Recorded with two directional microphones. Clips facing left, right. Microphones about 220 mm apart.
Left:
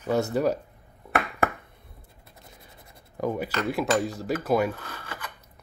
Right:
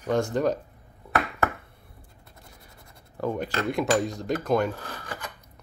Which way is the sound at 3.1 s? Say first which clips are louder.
Even; 10° left (ahead or behind).